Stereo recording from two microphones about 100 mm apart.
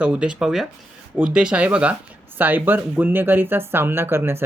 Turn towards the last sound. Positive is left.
turn(degrees=-20)  # may be behind; listen again after turning